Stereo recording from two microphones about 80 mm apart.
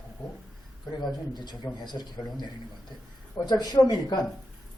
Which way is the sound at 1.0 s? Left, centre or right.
Left.